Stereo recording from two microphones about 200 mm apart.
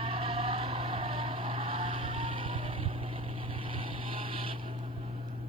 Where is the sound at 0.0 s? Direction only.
30° right (ahead or behind).